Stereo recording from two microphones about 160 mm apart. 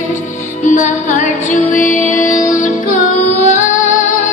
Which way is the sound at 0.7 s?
50° left (ahead or behind).